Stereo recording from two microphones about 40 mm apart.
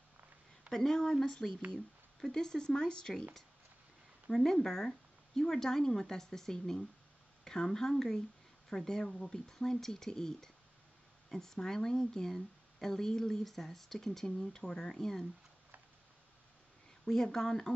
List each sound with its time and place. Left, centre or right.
0.7 s speech: centre
4.5 s speech: centre
17.0 s speech: centre